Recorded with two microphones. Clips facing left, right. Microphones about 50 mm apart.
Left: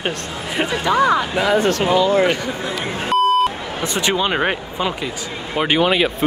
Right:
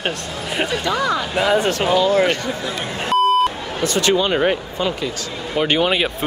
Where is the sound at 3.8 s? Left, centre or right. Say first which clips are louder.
Right 2 dB; centre.